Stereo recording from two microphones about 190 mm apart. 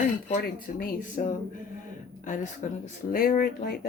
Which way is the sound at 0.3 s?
45° left (ahead or behind).